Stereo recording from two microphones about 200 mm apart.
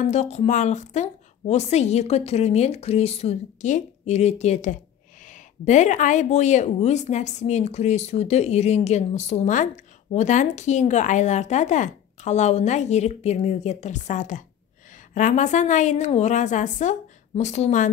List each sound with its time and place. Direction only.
0.0 s a woman's voice: 35° left (ahead or behind)